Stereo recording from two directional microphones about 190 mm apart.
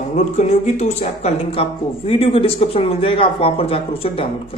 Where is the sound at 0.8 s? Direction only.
35° left (ahead or behind).